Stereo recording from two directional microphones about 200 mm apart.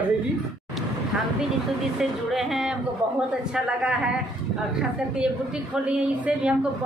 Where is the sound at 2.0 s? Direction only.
Centre (ahead or behind).